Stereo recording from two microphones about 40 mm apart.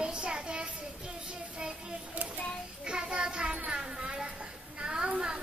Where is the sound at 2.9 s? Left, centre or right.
Right.